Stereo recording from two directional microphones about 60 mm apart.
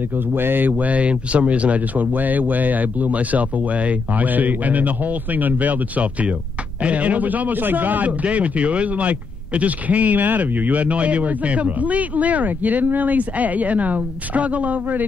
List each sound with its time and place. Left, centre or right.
0.3 s a man's voice: right